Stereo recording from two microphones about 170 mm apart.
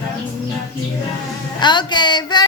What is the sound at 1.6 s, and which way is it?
Speech, 25° left (ahead or behind).